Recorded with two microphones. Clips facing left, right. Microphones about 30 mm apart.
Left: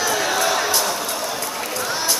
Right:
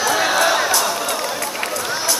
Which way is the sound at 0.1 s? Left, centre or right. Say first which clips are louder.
Right 6 dB; centre.